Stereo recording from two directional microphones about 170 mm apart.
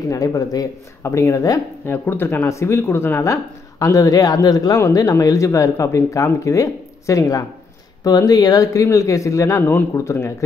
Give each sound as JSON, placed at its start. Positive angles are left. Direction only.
{"t": 0.1, "sound": "speech", "side_deg": 20}